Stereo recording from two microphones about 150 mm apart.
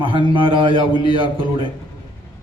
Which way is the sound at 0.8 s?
30° left (ahead or behind).